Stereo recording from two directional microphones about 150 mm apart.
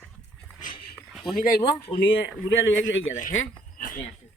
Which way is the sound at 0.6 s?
70° left (ahead or behind).